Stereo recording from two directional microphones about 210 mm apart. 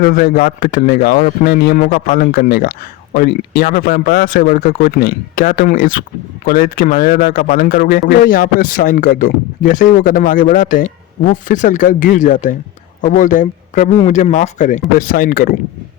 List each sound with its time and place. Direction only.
0.0 s speech: 45° left (ahead or behind)